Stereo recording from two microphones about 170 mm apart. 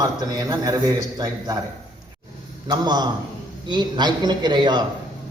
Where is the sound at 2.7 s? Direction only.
25° right (ahead or behind).